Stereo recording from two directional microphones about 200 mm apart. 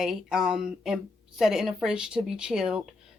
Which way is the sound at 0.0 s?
Centre (ahead or behind).